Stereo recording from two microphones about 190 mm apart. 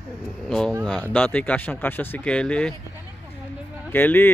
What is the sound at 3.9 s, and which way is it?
Speech, 10° left (ahead or behind).